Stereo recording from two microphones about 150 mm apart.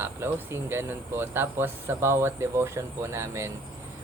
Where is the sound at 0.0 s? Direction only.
15° right (ahead or behind).